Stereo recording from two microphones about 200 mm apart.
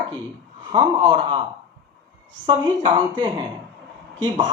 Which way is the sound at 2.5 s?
25° right (ahead or behind).